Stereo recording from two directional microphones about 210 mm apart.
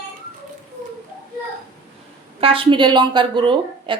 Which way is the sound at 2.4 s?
25° right (ahead or behind).